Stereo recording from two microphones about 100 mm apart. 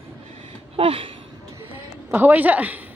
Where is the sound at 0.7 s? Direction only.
65° right (ahead or behind).